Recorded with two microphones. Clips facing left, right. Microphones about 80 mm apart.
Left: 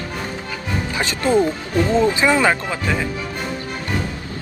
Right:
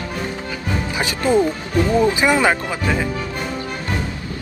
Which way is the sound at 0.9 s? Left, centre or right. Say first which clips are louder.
Even; centre.